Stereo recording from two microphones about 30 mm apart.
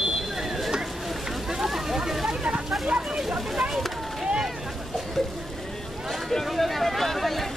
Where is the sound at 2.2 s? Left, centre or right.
Right.